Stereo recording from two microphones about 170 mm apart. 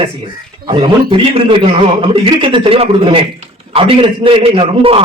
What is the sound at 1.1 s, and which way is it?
A man's voice, 35° right (ahead or behind).